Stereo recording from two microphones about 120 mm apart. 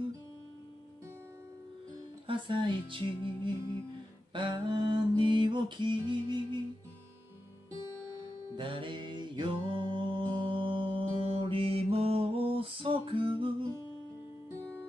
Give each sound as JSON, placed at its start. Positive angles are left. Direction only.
{"t": 2.2, "sound": "music", "side_deg": -45}
{"t": 4.3, "sound": "mantra", "side_deg": -40}
{"t": 8.5, "sound": "music", "side_deg": -45}